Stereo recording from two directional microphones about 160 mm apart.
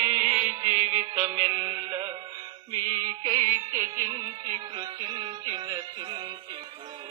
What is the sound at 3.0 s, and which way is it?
Music, 20° right (ahead or behind).